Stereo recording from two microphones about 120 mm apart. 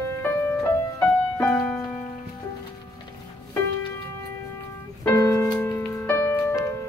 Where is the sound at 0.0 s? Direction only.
20° left (ahead or behind).